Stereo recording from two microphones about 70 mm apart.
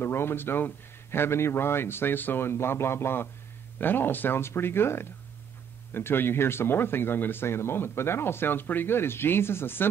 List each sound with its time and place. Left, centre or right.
0.0 s speech: left